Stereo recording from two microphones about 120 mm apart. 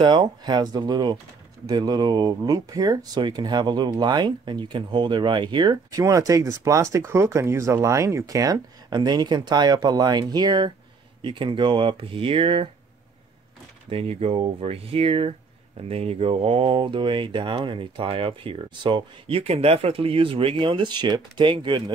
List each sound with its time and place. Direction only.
0.0 s speech: 40° right (ahead or behind)
13.8 s speech: 55° right (ahead or behind)